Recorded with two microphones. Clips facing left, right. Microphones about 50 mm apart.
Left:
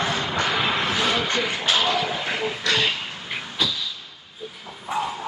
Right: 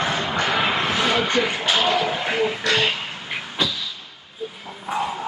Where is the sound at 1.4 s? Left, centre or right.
Centre.